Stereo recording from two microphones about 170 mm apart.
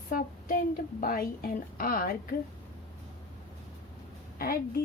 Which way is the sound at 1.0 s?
60° left (ahead or behind).